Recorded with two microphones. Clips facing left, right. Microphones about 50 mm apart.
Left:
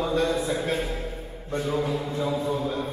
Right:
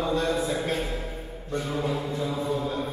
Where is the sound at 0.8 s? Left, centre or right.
Centre.